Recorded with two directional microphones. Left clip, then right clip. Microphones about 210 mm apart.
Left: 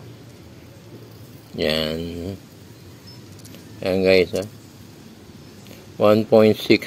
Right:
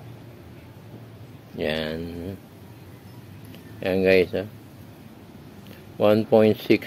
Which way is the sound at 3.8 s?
15° left (ahead or behind).